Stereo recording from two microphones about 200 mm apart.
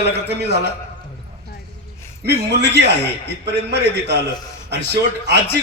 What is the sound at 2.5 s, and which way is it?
Speech, 60° right (ahead or behind).